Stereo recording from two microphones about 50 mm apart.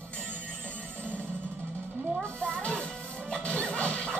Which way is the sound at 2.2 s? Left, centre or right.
Left.